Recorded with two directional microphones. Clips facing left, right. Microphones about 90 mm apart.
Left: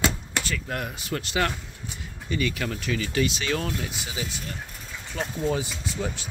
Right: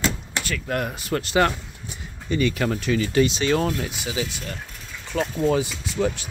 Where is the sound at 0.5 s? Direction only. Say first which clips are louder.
Right 9 dB; 60° right (ahead or behind); by 3.7 s 35° right (ahead or behind).